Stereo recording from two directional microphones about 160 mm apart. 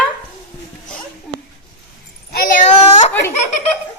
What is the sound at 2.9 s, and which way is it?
Laughter, 45° left (ahead or behind).